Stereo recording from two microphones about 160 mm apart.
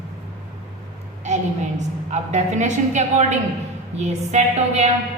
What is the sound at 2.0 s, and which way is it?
A woman's voice, 45° right (ahead or behind).